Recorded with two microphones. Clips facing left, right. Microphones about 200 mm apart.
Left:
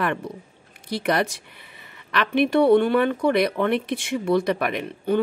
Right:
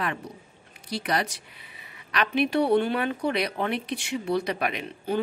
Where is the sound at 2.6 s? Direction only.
55° left (ahead or behind).